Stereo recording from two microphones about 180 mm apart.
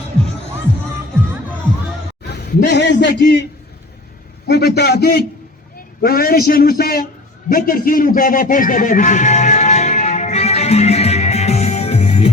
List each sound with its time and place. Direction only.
2.3 s a man's voice: 60° left (ahead or behind)
4.4 s a man's voice: 65° left (ahead or behind)
7.5 s music: 50° left (ahead or behind); by 12.3 s 35° left (ahead or behind)